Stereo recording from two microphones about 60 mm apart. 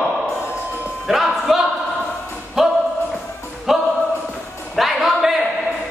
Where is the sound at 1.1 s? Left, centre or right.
Centre.